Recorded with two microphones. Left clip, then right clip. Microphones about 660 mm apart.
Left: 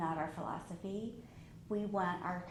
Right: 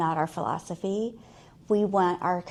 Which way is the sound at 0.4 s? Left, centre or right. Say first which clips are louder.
Right 13 dB; right.